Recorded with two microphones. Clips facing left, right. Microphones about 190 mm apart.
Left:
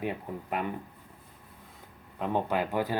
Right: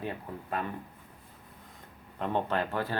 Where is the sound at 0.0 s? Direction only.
15° left (ahead or behind).